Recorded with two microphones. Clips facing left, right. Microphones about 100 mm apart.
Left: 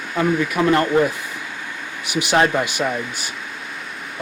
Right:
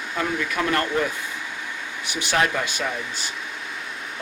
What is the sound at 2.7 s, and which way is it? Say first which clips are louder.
Speech: left 5 dB; 15° left (ahead or behind).